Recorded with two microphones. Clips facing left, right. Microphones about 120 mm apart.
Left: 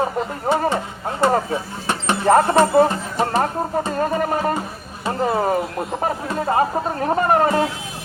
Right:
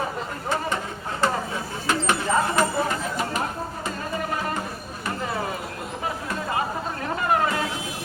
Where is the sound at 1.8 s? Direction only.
25° left (ahead or behind).